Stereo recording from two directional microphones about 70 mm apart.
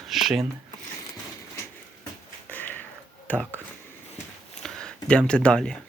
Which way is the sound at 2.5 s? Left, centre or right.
Left.